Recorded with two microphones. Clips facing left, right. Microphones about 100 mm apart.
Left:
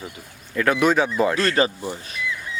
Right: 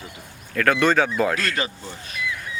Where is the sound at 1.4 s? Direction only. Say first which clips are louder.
Left 6 dB; 35° left (ahead or behind).